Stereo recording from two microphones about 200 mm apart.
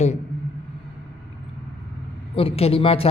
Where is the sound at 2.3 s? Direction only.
30° left (ahead or behind).